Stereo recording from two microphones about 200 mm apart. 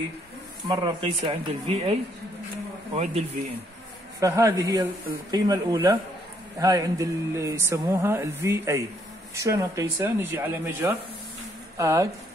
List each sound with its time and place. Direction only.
0.7 s speech: 20° right (ahead or behind)
4.2 s speech: 15° right (ahead or behind)